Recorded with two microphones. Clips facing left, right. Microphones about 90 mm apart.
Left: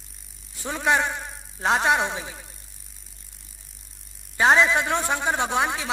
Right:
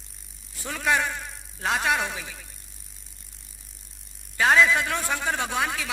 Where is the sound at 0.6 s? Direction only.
25° left (ahead or behind).